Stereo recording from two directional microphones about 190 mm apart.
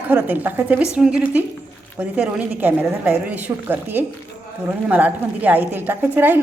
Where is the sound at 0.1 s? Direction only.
10° right (ahead or behind).